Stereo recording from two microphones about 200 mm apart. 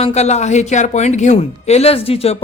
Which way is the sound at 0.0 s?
35° left (ahead or behind).